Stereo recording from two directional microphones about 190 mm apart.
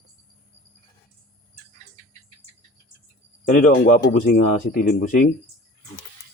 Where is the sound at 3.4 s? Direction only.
45° left (ahead or behind).